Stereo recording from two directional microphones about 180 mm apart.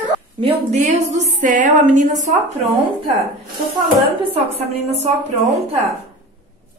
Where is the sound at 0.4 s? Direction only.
35° right (ahead or behind).